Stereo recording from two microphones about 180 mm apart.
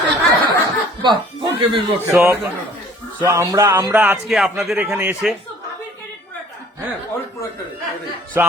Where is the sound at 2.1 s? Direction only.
15° right (ahead or behind).